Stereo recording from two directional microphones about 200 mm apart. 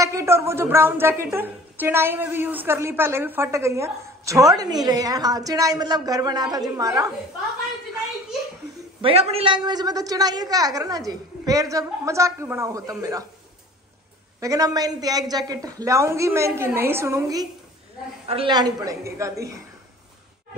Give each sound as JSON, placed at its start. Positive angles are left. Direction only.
{"t": 0.0, "sound": "a woman's voice", "side_deg": -15}
{"t": 9.0, "sound": "a woman's voice", "side_deg": -30}
{"t": 14.4, "sound": "a woman's voice", "side_deg": -15}
{"t": 18.2, "sound": "a woman's voice", "side_deg": -30}